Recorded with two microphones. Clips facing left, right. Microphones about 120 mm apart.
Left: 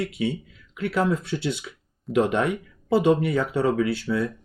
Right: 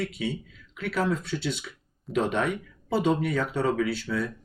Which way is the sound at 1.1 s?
15° left (ahead or behind).